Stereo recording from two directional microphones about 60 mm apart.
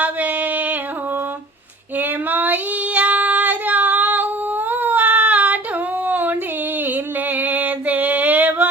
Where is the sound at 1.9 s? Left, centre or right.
Right.